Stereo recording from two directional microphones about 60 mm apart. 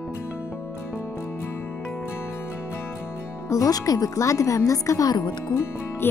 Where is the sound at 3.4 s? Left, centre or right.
Left.